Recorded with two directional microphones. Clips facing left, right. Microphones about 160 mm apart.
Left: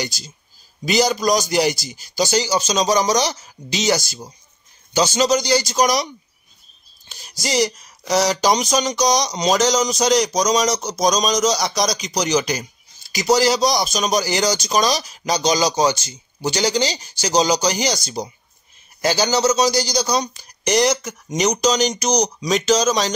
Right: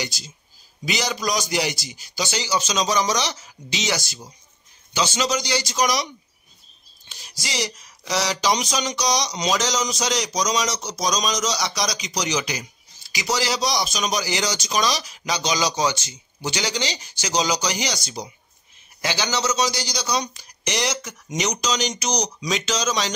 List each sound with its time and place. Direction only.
0.0 s a man's voice: 40° left (ahead or behind)
7.1 s a man's voice: 40° left (ahead or behind)